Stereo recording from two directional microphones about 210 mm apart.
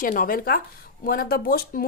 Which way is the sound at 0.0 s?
40° left (ahead or behind).